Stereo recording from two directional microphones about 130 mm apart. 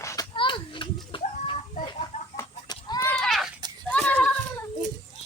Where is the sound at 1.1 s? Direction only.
40° left (ahead or behind).